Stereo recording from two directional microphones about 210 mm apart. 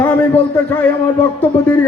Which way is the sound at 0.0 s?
5° left (ahead or behind).